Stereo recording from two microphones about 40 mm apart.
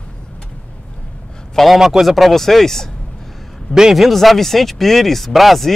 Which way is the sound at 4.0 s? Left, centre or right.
Centre.